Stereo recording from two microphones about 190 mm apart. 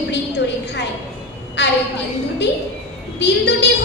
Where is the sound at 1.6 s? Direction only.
65° left (ahead or behind).